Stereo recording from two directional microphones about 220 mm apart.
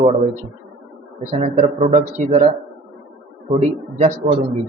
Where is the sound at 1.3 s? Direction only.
25° right (ahead or behind).